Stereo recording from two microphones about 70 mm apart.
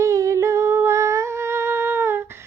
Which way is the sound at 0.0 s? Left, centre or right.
Right.